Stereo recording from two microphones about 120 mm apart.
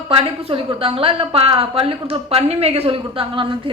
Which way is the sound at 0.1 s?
55° right (ahead or behind).